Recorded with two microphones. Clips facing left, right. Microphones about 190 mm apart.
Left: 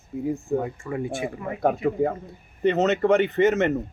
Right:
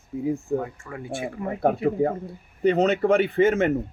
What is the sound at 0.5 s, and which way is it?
Speech, 20° left (ahead or behind).